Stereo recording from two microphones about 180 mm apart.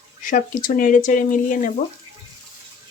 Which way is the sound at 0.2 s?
50° left (ahead or behind).